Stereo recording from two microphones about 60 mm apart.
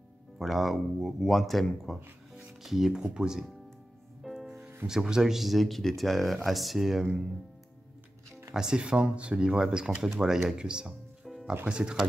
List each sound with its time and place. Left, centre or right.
0.4 s speech: centre
4.2 s music: centre
4.6 s music: right
4.8 s speech: centre
8.5 s speech: centre
11.2 s music: centre
11.6 s speech: centre